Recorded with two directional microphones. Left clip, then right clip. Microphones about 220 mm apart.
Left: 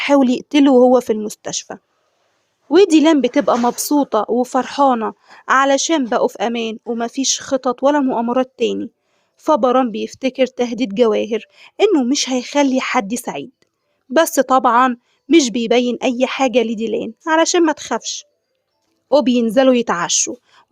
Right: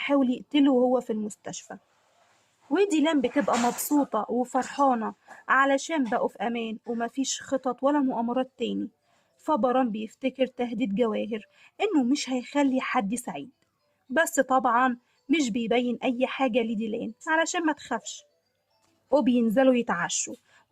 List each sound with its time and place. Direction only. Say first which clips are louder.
0.0 s speech: left 11 dB; 50° left (ahead or behind)
19.0 s speech: left 9 dB; 40° left (ahead or behind)